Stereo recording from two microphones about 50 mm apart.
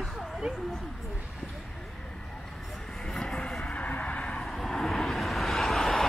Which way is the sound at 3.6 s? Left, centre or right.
Left.